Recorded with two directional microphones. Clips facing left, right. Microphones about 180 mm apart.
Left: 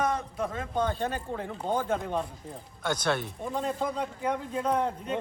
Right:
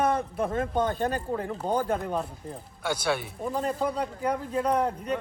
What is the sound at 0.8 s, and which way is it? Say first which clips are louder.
Speech: right 3 dB; 40° right (ahead or behind).